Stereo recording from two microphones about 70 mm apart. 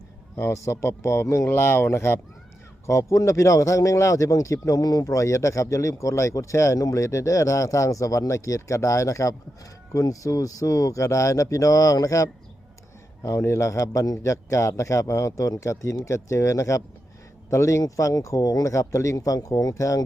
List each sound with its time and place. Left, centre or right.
0.3 s speech: left
1.5 s speech: left
4.8 s speech: left
5.0 s speech: left
13.2 s speech: left